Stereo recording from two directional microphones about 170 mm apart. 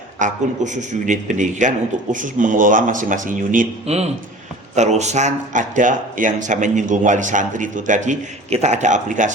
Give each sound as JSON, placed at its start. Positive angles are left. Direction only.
{"t": 0.2, "sound": "speech", "side_deg": -45}
{"t": 3.8, "sound": "a man's voice", "side_deg": -40}